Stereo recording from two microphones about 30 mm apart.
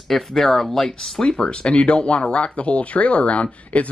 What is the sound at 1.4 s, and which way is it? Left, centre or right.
Speech, left.